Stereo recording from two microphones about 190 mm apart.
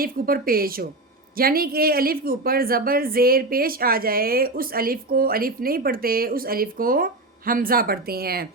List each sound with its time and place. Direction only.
0.0 s speech: 50° right (ahead or behind)